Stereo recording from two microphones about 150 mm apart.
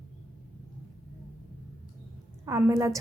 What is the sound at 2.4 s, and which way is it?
Speech, 20° right (ahead or behind).